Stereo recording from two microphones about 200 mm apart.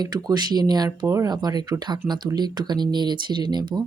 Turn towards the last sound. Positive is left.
turn(degrees=-20)  # may be behind; listen again after turning